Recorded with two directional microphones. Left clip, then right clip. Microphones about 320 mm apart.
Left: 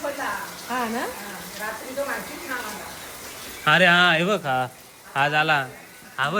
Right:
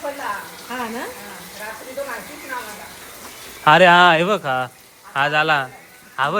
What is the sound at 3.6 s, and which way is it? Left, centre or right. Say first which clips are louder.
A man's voice: right 6 dB; centre.